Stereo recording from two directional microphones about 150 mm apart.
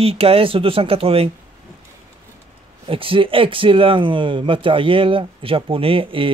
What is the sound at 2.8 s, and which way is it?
Speech, 35° right (ahead or behind).